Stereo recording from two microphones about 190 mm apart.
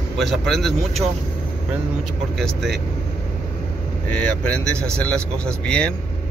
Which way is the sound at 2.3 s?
Centre (ahead or behind).